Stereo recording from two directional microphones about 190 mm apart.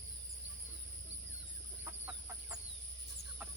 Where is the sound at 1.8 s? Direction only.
10° right (ahead or behind).